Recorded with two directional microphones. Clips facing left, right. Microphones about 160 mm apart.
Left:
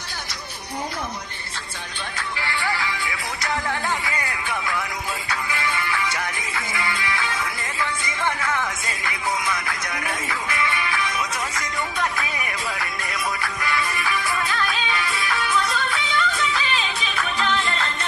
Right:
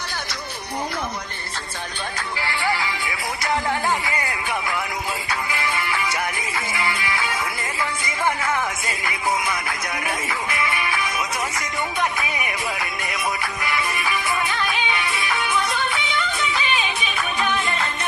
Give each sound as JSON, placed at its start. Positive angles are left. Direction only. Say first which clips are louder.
{"t": 2.4, "sound": "music", "louder": "right 2 dB", "side_deg": -30}